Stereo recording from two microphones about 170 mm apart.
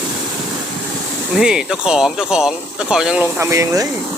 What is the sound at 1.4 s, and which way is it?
Speech, 5° right (ahead or behind).